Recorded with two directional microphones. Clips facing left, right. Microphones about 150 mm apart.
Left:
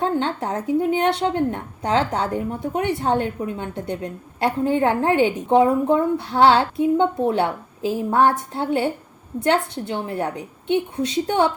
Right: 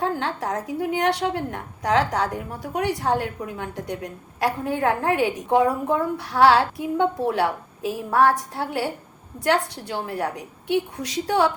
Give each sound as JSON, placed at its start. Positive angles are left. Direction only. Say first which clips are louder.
{"t": 0.0, "sound": "a woman's voice", "louder": "left 3 dB", "side_deg": 25}